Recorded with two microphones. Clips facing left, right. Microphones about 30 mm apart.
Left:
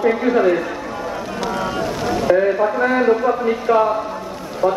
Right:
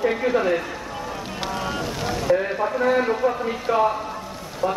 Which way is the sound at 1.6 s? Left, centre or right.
Centre.